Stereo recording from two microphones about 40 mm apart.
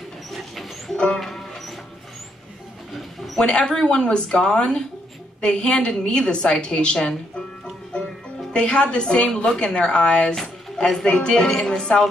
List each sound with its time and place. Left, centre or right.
0.3 s a sound: centre
0.9 s music: left
1.2 s music: centre
3.3 s a woman's voice: left
8.5 s a woman's voice: left